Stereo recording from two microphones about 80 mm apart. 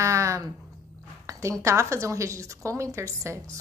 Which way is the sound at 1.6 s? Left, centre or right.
Right.